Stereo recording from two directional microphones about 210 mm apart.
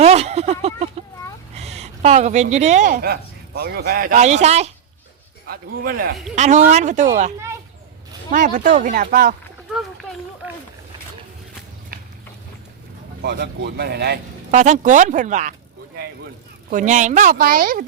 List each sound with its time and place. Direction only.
0.0 s a sound: 30° right (ahead or behind)
1.5 s a woman's voice: 30° right (ahead or behind)
5.5 s speech: 45° right (ahead or behind)
6.3 s speech: 35° right (ahead or behind)
13.2 s speech: 50° right (ahead or behind)
14.5 s speech: 35° right (ahead or behind)